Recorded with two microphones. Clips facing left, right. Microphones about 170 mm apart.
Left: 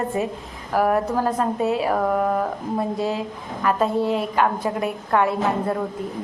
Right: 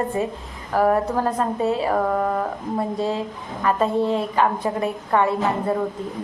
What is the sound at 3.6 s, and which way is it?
A woman's voice, 5° left (ahead or behind).